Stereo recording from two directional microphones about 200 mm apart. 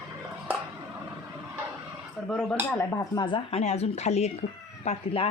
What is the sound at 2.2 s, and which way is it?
Speech, 5° left (ahead or behind).